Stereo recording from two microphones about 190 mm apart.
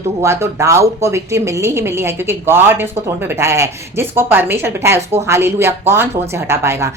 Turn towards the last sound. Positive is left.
turn(degrees=-15)  # may be behind; listen again after turning